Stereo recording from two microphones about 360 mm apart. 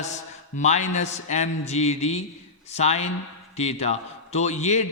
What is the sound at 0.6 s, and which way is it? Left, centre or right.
A man's voice, centre.